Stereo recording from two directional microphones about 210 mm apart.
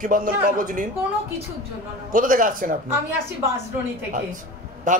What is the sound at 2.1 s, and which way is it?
Speech, 40° right (ahead or behind).